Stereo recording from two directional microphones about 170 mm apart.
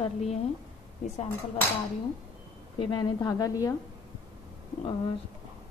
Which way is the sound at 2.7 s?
25° left (ahead or behind).